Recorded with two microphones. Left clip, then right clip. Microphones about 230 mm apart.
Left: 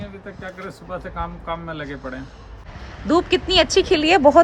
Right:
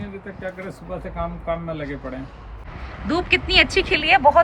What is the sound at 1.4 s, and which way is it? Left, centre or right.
Speech, centre.